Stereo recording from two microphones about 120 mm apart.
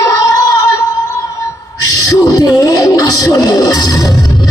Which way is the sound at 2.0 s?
30° left (ahead or behind).